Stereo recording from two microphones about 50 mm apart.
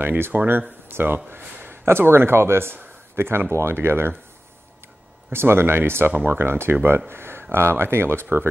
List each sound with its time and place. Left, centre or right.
0.0 s speech: right
5.3 s speech: right